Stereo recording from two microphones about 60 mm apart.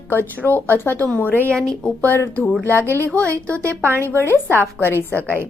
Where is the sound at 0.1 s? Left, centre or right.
Left.